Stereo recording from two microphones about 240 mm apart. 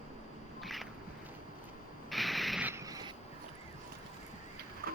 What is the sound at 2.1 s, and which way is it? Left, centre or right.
Mechanisms, centre.